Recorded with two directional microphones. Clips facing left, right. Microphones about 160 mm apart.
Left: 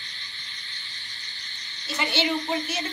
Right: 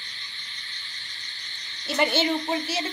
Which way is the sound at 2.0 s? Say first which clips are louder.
Right 3 dB; 45° right (ahead or behind).